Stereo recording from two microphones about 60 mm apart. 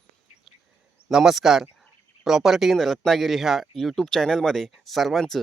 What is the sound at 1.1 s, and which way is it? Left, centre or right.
A man's voice, centre.